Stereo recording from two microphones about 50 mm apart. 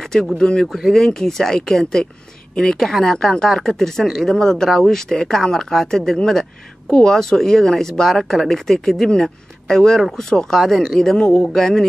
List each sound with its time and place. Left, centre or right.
0.0 s a sound: centre
0.4 s speech: centre
0.7 s speech: centre
0.9 s speech: centre